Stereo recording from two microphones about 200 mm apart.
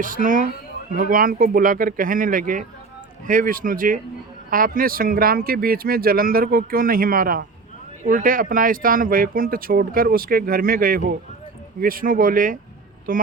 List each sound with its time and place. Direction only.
0.0 s speech: 45° right (ahead or behind)